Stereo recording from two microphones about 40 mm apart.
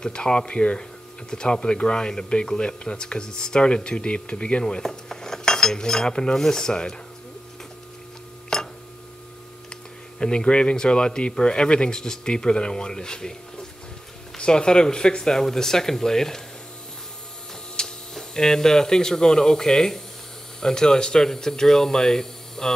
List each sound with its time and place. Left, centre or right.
0.0 s speech: left
4.8 s cutlery: centre
6.3 s speech: centre
8.5 s a sound: centre
10.1 s speech: left
17.8 s a sound: centre
18.3 s speech: centre